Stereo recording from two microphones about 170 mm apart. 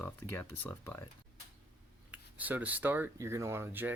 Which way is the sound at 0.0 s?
15° left (ahead or behind).